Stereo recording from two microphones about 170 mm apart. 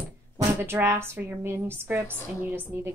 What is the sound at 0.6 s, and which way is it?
A woman's voice, 15° right (ahead or behind).